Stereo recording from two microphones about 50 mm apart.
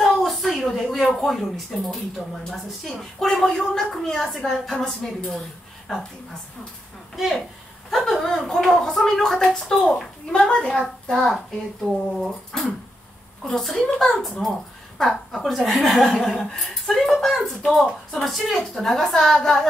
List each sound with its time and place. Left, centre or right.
0.0 s a woman's voice: centre
7.2 s a woman's voice: centre
11.8 s a woman's voice: centre